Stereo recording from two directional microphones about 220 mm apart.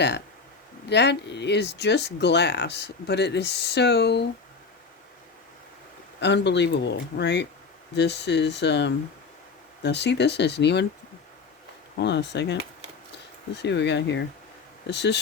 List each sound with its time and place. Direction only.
0.9 s speech: 50° left (ahead or behind)
6.1 s speech: 50° left (ahead or behind)
11.9 s speech: 50° left (ahead or behind)